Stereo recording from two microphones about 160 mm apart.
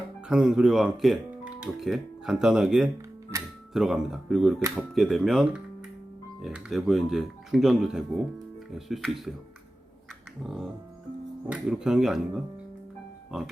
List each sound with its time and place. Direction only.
0.3 s speech: 5° right (ahead or behind)
3.3 s music: 15° right (ahead or behind)
3.7 s speech: centre (ahead or behind)
10.4 s speech: 5° right (ahead or behind)